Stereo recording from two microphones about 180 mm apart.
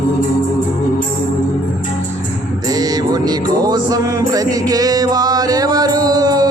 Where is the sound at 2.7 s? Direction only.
20° right (ahead or behind).